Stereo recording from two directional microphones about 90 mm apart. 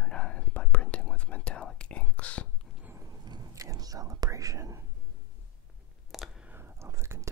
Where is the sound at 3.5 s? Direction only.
40° right (ahead or behind).